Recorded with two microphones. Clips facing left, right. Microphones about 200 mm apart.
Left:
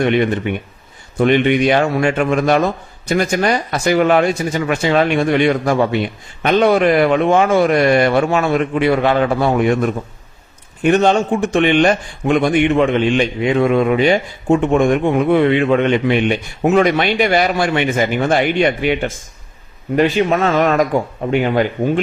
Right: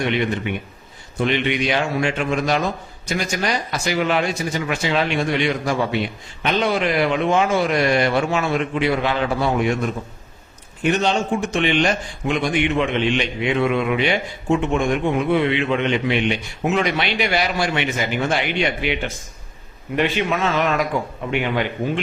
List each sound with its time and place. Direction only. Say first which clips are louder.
0.0 s a man's voice: left 6 dB; 50° left (ahead or behind)